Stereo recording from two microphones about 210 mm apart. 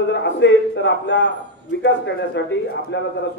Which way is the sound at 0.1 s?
60° left (ahead or behind).